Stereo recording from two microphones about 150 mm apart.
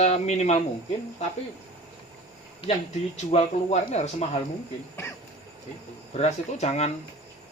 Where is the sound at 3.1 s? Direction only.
50° left (ahead or behind).